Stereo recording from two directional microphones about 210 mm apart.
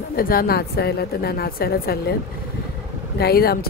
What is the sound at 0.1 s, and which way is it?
Speech, 45° left (ahead or behind).